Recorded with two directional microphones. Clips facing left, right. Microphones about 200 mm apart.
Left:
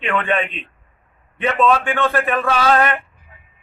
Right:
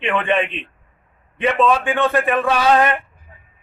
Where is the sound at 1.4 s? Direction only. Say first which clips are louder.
Even; 15° right (ahead or behind).